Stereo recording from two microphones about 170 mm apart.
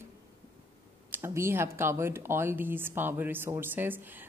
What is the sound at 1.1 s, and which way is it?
Speech, 15° right (ahead or behind).